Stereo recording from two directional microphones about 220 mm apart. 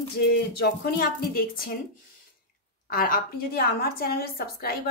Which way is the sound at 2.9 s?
40° left (ahead or behind).